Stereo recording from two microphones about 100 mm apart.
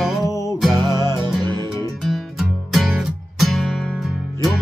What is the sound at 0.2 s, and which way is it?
Music, 30° left (ahead or behind).